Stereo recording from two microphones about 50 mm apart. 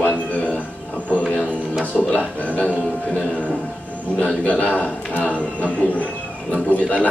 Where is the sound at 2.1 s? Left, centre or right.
Left.